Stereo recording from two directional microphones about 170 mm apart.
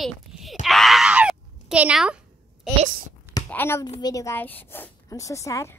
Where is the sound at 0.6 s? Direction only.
Centre (ahead or behind).